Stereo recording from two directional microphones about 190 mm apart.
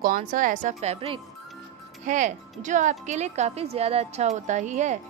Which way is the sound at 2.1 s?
40° right (ahead or behind).